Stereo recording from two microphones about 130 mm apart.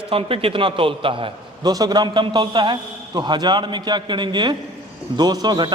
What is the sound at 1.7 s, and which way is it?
A man's voice, 30° right (ahead or behind).